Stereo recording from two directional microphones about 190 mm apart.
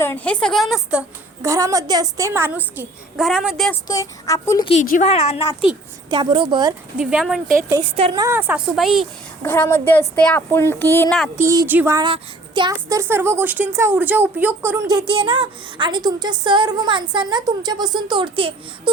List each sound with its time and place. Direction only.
0.0 s a woman's voice: 10° left (ahead or behind)
1.5 s a woman's voice: 15° right (ahead or behind); by 3.7 s centre (ahead or behind)
3.8 s a woman's voice: 15° left (ahead or behind)
4.7 s a woman's voice: 40° left (ahead or behind)
6.1 s speech: 25° right (ahead or behind)
6.9 s speech: 5° right (ahead or behind)
7.7 s speech: 30° right (ahead or behind)
8.1 s a woman's voice: 15° right (ahead or behind)
8.7 s speech: centre (ahead or behind)
9.4 s a woman's voice: 10° left (ahead or behind)
11.4 s speech: 15° right (ahead or behind)